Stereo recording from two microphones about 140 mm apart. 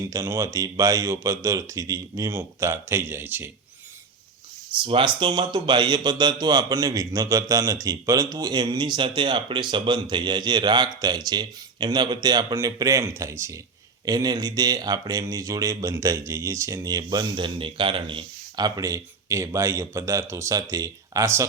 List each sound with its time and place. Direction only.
0.0 s speech: 20° right (ahead or behind)
4.8 s speech: 35° right (ahead or behind); by 21.4 s 20° right (ahead or behind)